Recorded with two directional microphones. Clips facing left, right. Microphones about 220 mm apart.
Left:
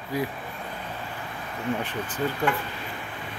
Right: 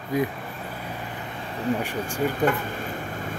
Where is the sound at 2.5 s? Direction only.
45° right (ahead or behind).